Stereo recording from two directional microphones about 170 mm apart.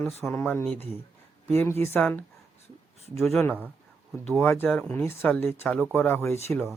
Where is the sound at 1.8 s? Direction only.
10° left (ahead or behind).